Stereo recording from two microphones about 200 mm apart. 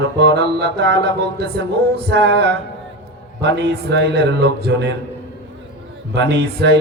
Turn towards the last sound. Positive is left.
turn(degrees=-55)  # may be behind; listen again after turning